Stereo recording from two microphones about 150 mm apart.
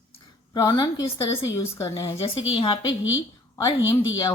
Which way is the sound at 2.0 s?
40° left (ahead or behind).